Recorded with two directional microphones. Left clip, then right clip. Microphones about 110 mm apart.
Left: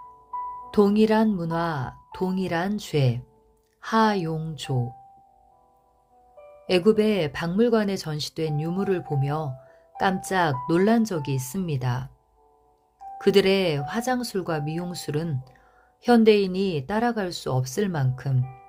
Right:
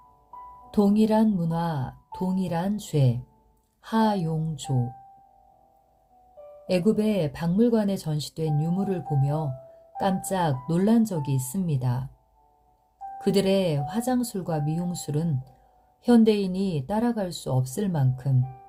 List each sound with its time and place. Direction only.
0.7 s speech: 20° left (ahead or behind)
6.7 s speech: 20° left (ahead or behind)
13.1 s speech: 20° left (ahead or behind)